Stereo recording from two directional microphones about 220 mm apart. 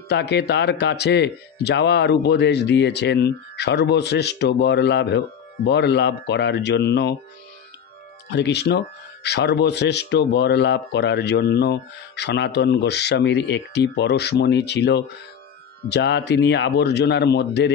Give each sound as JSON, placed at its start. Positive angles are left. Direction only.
{"t": 0.1, "sound": "speech", "side_deg": 50}
{"t": 8.3, "sound": "speech", "side_deg": 50}